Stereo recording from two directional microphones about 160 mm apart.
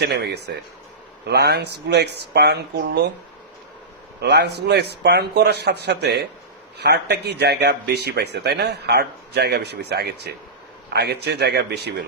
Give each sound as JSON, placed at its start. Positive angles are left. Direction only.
{"t": 0.0, "sound": "speech", "side_deg": -90}
{"t": 4.2, "sound": "speech", "side_deg": -90}